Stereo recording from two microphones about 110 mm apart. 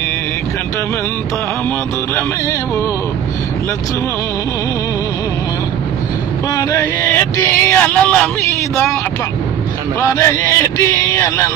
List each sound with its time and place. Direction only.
6.5 s speech: 25° left (ahead or behind)
10.0 s speech: 30° left (ahead or behind)